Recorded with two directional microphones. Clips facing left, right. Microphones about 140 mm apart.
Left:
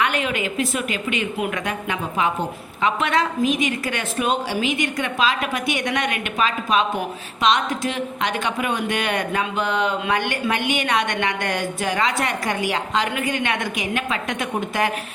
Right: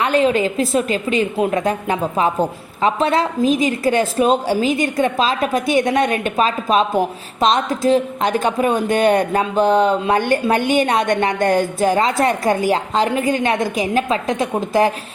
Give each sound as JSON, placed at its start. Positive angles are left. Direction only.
{"t": 0.0, "sound": "speech", "side_deg": -35}